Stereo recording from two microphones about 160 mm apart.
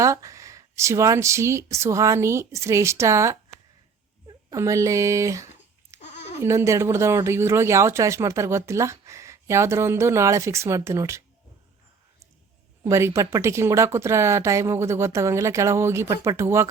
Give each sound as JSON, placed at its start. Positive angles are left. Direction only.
{"t": 0.0, "sound": "speech", "side_deg": -20}
{"t": 4.5, "sound": "speech", "side_deg": -20}
{"t": 5.9, "sound": "a sound", "side_deg": -20}
{"t": 6.4, "sound": "speech", "side_deg": -15}
{"t": 12.8, "sound": "speech", "side_deg": -15}